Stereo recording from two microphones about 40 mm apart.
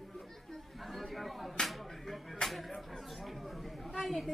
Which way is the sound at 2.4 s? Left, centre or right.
Left.